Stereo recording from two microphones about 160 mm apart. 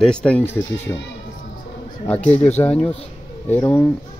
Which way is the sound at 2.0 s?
10° left (ahead or behind).